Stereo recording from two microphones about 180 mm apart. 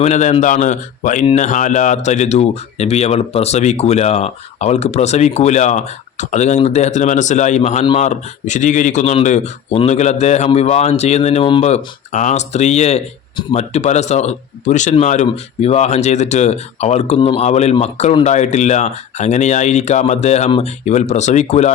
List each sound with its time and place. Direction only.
0.0 s speech: 40° left (ahead or behind)